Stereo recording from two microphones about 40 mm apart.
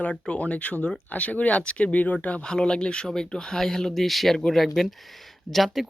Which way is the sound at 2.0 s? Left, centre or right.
Left.